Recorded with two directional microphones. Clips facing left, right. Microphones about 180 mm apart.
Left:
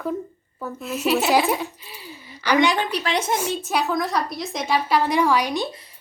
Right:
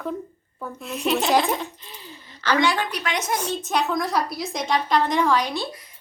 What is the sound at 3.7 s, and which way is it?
A woman's voice, 5° left (ahead or behind).